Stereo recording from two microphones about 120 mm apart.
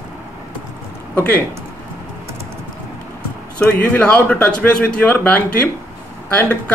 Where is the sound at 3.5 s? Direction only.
10° left (ahead or behind).